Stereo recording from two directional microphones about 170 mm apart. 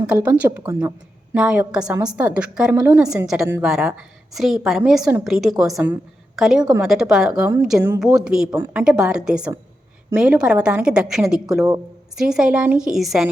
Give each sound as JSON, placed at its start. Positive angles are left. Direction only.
{"t": 0.1, "sound": "a woman's voice", "side_deg": -10}
{"t": 7.8, "sound": "a woman's voice", "side_deg": -15}
{"t": 8.0, "sound": "a woman's voice", "side_deg": -5}
{"t": 8.4, "sound": "a woman's voice", "side_deg": -15}